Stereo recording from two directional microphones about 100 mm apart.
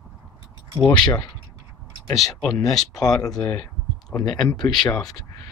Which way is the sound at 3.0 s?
40° left (ahead or behind).